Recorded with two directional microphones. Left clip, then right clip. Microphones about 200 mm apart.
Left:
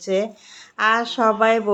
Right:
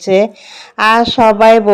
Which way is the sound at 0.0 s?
35° right (ahead or behind).